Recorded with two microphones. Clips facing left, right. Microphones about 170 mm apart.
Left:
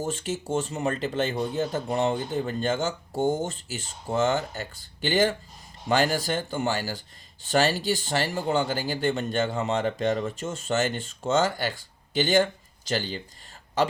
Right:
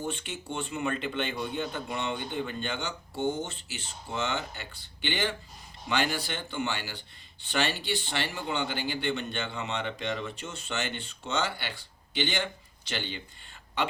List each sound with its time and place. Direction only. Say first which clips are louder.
0.0 s speech: left 6 dB; 40° left (ahead or behind)